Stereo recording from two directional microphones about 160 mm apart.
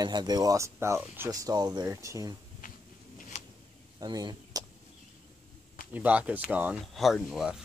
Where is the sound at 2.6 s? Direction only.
55° left (ahead or behind).